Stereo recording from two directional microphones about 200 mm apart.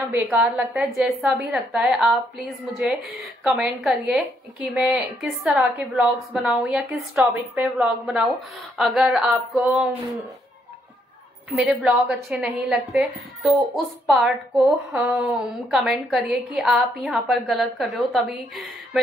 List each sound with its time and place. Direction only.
0.1 s a woman's voice: 10° right (ahead or behind)
11.5 s a woman's voice: 5° right (ahead or behind)